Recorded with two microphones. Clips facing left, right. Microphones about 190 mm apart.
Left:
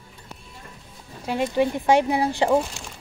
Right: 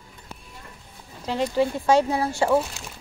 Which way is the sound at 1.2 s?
15° left (ahead or behind).